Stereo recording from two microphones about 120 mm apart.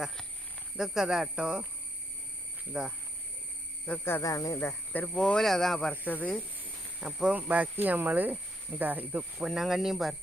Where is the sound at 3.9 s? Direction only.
20° left (ahead or behind).